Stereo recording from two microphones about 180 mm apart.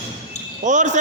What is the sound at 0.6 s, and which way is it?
Speech, 45° right (ahead or behind).